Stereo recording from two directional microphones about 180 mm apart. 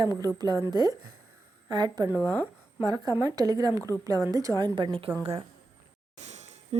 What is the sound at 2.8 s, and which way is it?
A woman's voice, 20° right (ahead or behind).